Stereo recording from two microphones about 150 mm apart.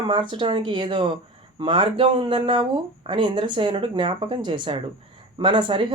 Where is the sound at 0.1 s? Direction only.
30° right (ahead or behind).